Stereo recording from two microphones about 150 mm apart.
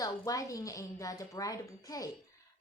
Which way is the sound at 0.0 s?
25° left (ahead or behind).